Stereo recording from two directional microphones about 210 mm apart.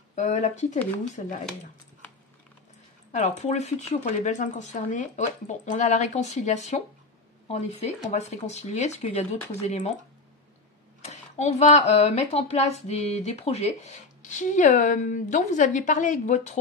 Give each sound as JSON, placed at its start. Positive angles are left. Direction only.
{"t": 0.1, "sound": "speech", "side_deg": 35}
{"t": 3.1, "sound": "speech", "side_deg": 35}
{"t": 11.0, "sound": "speech", "side_deg": 35}